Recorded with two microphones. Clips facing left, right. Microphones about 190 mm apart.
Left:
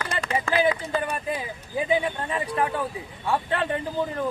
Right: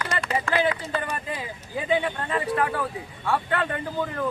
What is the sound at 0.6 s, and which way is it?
Speech, 10° left (ahead or behind).